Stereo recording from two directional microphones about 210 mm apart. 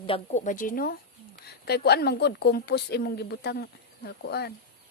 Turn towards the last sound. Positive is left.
turn(degrees=50)  # may be behind; listen again after turning